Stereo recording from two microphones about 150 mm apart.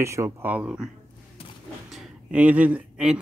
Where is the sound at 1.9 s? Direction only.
5° right (ahead or behind).